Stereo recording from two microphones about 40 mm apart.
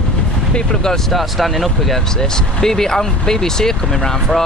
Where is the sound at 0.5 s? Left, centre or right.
Centre.